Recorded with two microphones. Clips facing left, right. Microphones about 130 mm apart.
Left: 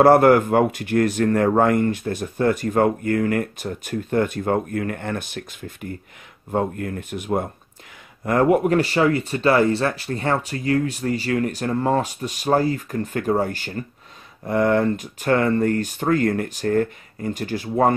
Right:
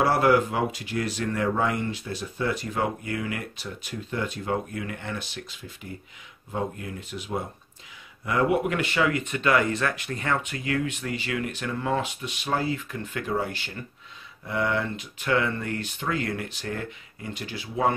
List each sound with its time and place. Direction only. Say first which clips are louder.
0.0 s speech: left 8 dB; 50° left (ahead or behind)